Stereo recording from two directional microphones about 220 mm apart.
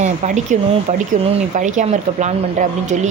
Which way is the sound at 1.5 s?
35° right (ahead or behind).